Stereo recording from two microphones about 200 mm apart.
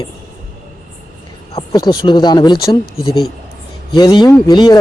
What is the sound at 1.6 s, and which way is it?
Speech, 20° left (ahead or behind).